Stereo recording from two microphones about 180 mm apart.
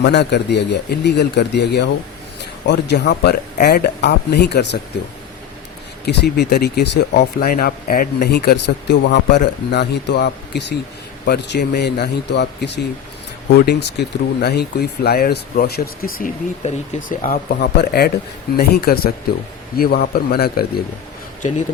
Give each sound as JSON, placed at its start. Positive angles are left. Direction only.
{"t": 0.0, "sound": "speech", "side_deg": 70}
{"t": 6.3, "sound": "speech", "side_deg": 65}